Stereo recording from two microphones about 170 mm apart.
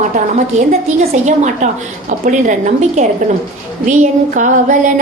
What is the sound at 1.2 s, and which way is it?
A woman's voice, 45° right (ahead or behind).